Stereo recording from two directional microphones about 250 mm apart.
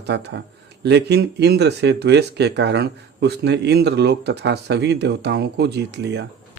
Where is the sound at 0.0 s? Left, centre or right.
Right.